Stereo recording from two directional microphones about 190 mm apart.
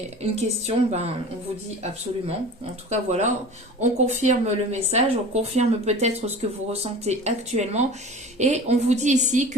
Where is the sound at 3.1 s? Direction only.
35° right (ahead or behind).